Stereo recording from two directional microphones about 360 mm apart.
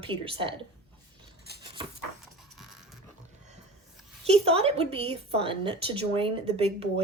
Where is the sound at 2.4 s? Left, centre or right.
Centre.